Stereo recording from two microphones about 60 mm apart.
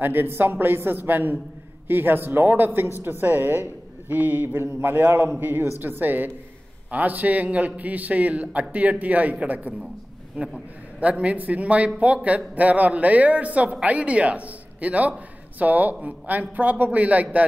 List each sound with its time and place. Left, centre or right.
0.0 s speech: right
11.0 s speech: right